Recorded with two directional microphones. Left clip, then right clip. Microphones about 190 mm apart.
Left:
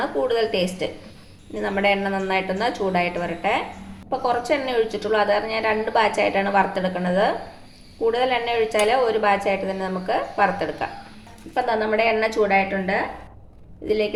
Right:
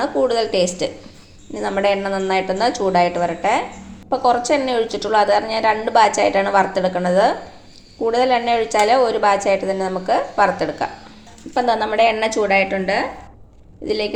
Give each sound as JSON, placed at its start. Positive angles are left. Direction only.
{"t": 0.0, "sound": "a woman's voice", "side_deg": -35}
{"t": 13.8, "sound": "a woman's voice", "side_deg": -35}